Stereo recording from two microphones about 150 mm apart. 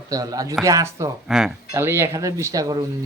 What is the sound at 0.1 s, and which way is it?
Speech, 25° right (ahead or behind).